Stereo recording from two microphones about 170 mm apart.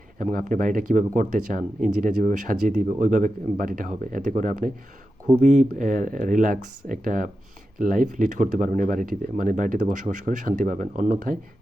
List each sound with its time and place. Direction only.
0.2 s speech: 50° right (ahead or behind)